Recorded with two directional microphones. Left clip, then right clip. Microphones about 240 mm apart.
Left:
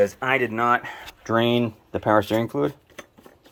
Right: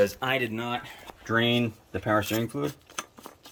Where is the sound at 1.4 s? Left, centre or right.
Centre.